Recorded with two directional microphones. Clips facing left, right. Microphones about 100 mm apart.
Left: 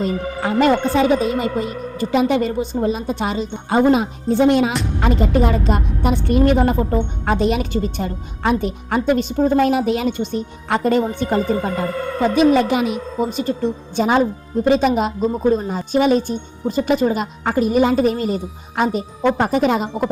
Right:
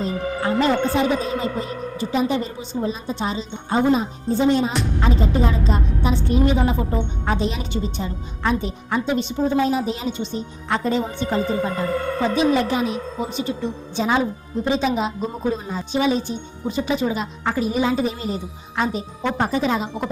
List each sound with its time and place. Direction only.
0.0 s speech: 75° left (ahead or behind)
4.9 s speech: 65° left (ahead or behind); by 9.6 s 45° left (ahead or behind)
9.6 s speech: 65° left (ahead or behind)
12.3 s a woman's voice: 65° left (ahead or behind)
13.1 s speech: 45° left (ahead or behind); by 19.9 s 60° left (ahead or behind)